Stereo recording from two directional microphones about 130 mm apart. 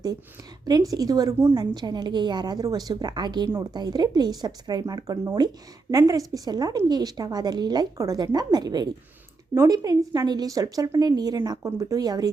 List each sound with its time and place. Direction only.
0.6 s a woman's voice: 30° right (ahead or behind)
1.5 s a woman's voice: 35° right (ahead or behind)